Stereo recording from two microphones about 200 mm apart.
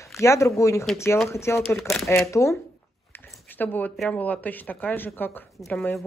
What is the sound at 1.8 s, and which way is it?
Speech, centre (ahead or behind).